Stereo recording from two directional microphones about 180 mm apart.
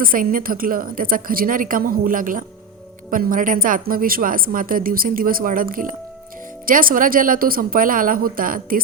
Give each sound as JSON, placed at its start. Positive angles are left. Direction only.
{"t": 0.0, "sound": "a woman's voice", "side_deg": -50}